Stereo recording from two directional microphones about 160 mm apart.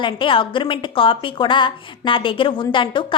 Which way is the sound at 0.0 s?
30° left (ahead or behind).